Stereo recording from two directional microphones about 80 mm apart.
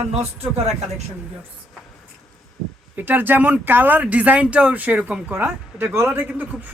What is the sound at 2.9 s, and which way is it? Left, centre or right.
A woman's voice, right.